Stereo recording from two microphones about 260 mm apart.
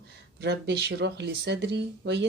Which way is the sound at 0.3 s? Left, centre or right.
Right.